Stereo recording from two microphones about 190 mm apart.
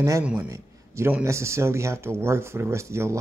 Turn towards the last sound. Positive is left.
turn(degrees=-15)  # may be behind; listen again after turning